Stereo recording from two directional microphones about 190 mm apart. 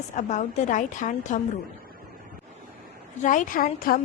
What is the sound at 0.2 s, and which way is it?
A woman's voice, 40° left (ahead or behind).